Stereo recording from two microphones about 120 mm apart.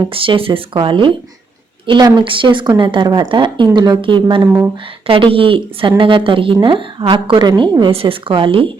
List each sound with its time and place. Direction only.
0.1 s speech: 45° right (ahead or behind)